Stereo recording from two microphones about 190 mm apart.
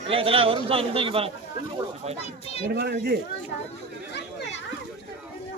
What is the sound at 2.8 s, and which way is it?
Speech, 60° right (ahead or behind).